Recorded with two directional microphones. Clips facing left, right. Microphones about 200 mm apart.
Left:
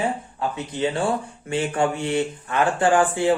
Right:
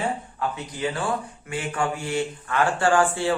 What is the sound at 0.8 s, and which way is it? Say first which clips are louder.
Speech: left 4 dB; 25° left (ahead or behind).